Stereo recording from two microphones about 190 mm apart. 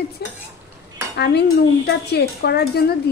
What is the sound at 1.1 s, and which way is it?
Dishes, 60° left (ahead or behind).